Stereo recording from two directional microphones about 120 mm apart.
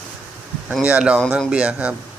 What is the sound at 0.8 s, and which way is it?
Speech, 10° right (ahead or behind).